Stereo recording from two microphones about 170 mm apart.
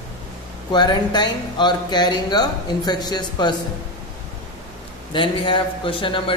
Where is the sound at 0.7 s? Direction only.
25° left (ahead or behind).